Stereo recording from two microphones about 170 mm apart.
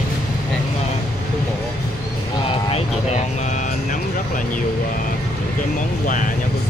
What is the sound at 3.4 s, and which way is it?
Vehicle, 45° left (ahead or behind).